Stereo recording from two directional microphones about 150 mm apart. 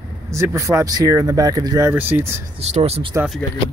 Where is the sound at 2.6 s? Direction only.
45° right (ahead or behind).